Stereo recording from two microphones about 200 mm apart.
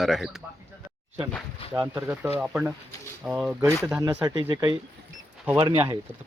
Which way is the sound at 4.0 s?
20° right (ahead or behind).